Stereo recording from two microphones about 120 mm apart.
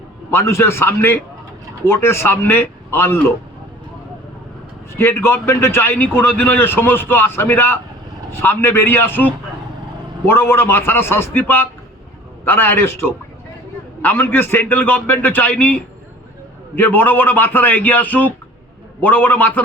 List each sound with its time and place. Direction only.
0.3 s speech: 20° left (ahead or behind)
4.9 s a man's voice: 20° left (ahead or behind)